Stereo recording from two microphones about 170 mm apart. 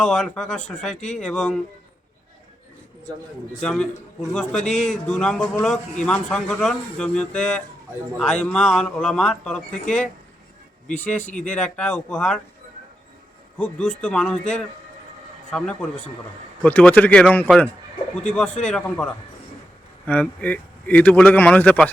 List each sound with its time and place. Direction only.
0.0 s a man's voice: 5° left (ahead or behind)
3.6 s a man's voice: 5° left (ahead or behind)
10.9 s a man's voice: 10° left (ahead or behind)
11.2 s speech: 45° left (ahead or behind)
11.4 s a man's voice: 5° left (ahead or behind)
13.6 s a man's voice: 5° left (ahead or behind)